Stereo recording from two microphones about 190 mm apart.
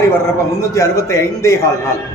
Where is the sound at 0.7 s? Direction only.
15° left (ahead or behind).